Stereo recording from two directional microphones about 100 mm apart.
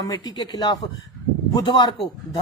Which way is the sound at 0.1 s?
45° left (ahead or behind).